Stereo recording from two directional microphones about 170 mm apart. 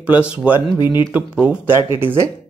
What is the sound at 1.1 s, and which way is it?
Speech, 10° right (ahead or behind).